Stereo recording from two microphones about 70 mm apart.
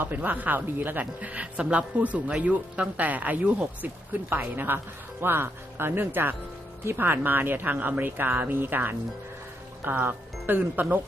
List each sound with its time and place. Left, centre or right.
0.0 s speech: right